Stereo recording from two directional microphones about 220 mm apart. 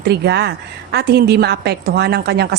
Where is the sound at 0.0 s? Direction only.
50° right (ahead or behind).